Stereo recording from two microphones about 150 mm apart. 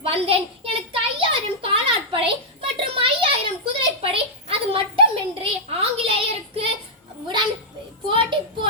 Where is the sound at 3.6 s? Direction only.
40° right (ahead or behind).